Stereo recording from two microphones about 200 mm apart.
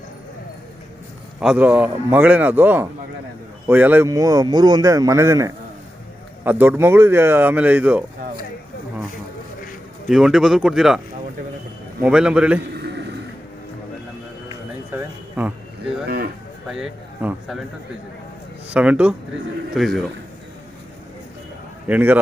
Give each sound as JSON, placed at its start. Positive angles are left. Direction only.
{"t": 1.4, "sound": "a man's voice", "side_deg": -5}
{"t": 10.1, "sound": "speech", "side_deg": -5}
{"t": 12.0, "sound": "speech", "side_deg": -5}
{"t": 14.9, "sound": "a sound", "side_deg": -10}
{"t": 16.0, "sound": "a sound", "side_deg": -50}
{"t": 16.6, "sound": "speech", "side_deg": 0}
{"t": 18.7, "sound": "a man's voice", "side_deg": -5}
{"t": 21.8, "sound": "a man's voice", "side_deg": -10}